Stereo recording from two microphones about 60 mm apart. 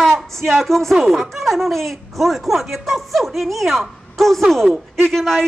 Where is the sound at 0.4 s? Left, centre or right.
Centre.